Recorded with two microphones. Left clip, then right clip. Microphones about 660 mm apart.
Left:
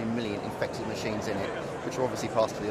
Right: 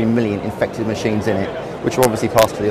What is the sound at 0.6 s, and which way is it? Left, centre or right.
Speech, right.